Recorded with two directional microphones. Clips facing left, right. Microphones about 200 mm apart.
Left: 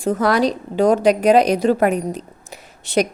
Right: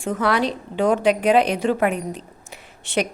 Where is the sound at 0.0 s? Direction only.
40° left (ahead or behind).